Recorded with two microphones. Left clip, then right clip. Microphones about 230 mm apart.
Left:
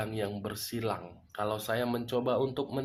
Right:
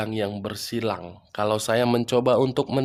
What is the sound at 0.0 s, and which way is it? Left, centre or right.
Speech, right.